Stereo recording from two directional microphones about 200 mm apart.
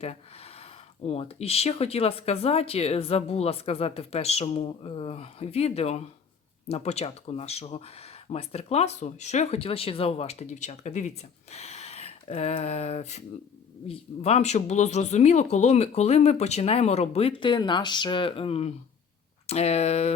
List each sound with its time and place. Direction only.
0.0 s speech: 30° left (ahead or behind)